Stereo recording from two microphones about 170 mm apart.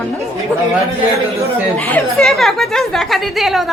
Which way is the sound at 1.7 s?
10° left (ahead or behind).